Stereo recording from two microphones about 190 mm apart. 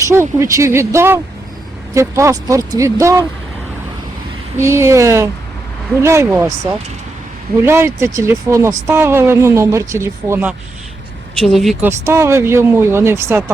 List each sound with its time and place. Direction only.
0.0 s speech: 15° right (ahead or behind)
4.5 s speech: 15° right (ahead or behind)
7.6 s speech: 15° right (ahead or behind)
11.4 s speech: centre (ahead or behind)
11.9 s speech: 15° right (ahead or behind)